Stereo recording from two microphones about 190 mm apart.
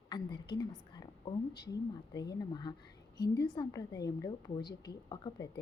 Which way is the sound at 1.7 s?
20° left (ahead or behind).